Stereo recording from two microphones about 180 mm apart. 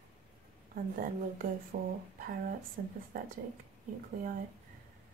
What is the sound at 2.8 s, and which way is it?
Speech, 55° right (ahead or behind).